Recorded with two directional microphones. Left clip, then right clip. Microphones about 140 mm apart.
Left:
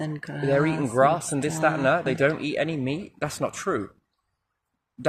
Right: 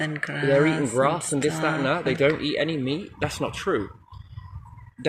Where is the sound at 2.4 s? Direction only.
90° left.